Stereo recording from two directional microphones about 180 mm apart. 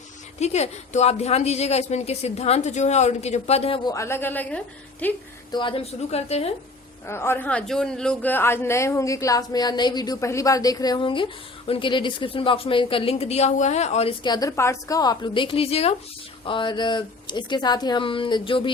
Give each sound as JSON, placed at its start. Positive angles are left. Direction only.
{"t": 0.3, "sound": "a woman's voice", "side_deg": 40}
{"t": 3.8, "sound": "a man's voice", "side_deg": 15}
{"t": 5.5, "sound": "a woman's voice", "side_deg": 25}
{"t": 7.1, "sound": "a man's voice", "side_deg": 15}
{"t": 14.3, "sound": "speech", "side_deg": 20}